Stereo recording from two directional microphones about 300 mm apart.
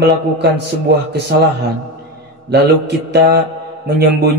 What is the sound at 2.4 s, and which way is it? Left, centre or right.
Mantra, right.